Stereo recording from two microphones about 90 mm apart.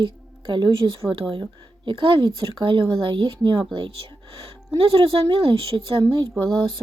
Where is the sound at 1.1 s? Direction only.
75° right (ahead or behind).